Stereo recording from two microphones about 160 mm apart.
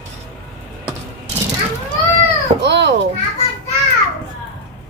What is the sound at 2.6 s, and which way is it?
Speech, 90° right.